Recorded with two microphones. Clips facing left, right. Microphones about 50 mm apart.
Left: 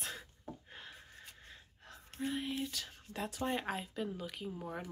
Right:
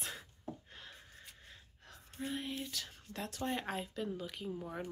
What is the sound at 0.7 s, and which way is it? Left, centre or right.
Gasp, centre.